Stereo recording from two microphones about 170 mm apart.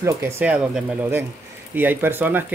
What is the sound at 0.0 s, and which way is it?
Speech, 15° right (ahead or behind).